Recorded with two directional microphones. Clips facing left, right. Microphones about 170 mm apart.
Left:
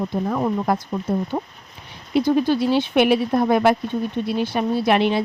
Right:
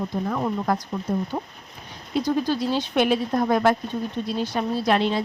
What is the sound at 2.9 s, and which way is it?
Speech, 10° left (ahead or behind).